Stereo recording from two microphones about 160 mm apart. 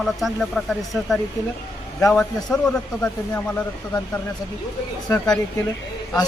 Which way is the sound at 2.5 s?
5° left (ahead or behind).